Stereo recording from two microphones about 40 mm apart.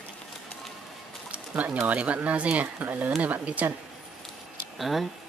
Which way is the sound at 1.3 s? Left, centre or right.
Right.